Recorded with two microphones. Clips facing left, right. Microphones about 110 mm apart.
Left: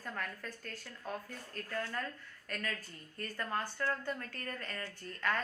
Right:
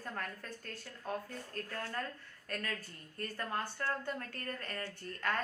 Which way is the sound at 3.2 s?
30° right (ahead or behind).